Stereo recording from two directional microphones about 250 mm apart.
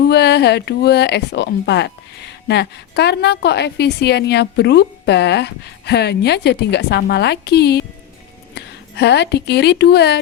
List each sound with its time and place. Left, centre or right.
0.1 s speech: left